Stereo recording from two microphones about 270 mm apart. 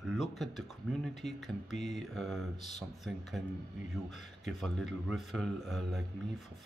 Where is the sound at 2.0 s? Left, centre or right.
Centre.